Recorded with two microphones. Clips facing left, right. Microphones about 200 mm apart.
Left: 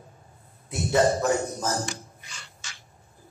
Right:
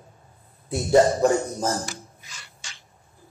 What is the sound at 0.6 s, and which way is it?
A man's voice, 30° right (ahead or behind).